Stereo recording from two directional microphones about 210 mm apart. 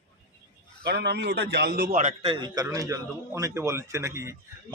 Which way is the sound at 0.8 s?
50° right (ahead or behind).